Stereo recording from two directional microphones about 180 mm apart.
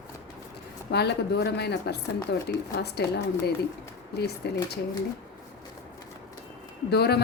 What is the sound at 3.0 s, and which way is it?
Speech, 65° left (ahead or behind).